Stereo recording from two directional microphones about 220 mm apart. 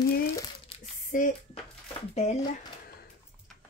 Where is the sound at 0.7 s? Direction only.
25° left (ahead or behind).